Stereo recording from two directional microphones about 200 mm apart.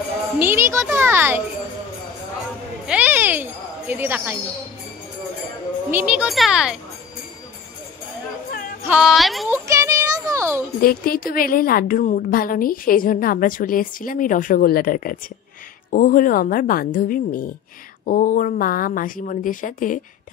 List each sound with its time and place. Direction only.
0.4 s a child's voice: 10° right (ahead or behind)
2.9 s jingle bell: 10° right (ahead or behind)
5.9 s a child's voice: 10° right (ahead or behind)
8.5 s music: 45° left (ahead or behind)
8.8 s a child's voice: 5° right (ahead or behind)
9.7 s music: 15° right (ahead or behind)
10.8 s a woman's voice: 45° left (ahead or behind)